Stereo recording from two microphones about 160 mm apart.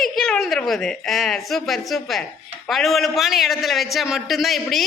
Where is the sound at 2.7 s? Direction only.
Centre (ahead or behind).